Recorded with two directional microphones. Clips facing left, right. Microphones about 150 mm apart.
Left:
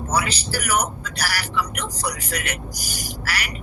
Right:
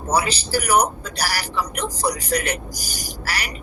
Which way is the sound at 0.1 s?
30° right (ahead or behind).